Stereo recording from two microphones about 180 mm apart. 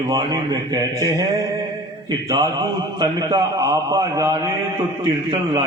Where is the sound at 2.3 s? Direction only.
20° right (ahead or behind).